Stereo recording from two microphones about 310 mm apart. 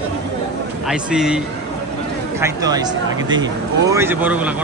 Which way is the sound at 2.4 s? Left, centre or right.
Centre.